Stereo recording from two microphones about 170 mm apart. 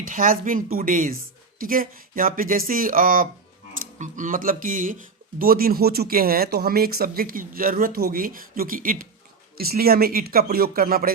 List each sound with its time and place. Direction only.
0.0 s speech: 55° right (ahead or behind)